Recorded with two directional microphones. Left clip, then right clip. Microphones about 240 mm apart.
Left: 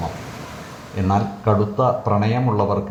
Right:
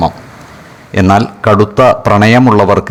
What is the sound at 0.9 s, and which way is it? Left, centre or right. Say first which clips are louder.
A man's voice: right 12 dB; right.